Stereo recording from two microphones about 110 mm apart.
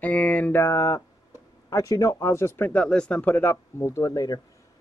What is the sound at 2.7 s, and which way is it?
A man's voice, 10° left (ahead or behind).